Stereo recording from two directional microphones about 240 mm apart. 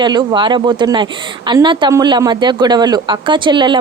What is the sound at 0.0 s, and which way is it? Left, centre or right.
Speech, centre.